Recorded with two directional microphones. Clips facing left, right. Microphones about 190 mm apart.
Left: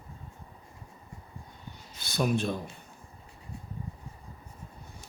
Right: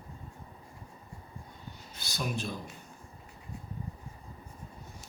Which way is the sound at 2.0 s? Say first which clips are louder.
Left 7 dB; 55° left (ahead or behind).